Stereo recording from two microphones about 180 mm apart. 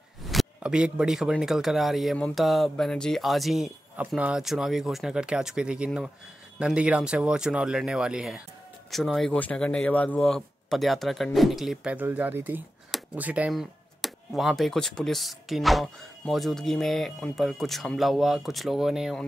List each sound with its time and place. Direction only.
0.2 s speech: centre (ahead or behind)